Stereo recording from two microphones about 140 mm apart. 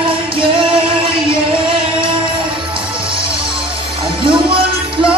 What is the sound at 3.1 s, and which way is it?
Music, 40° right (ahead or behind).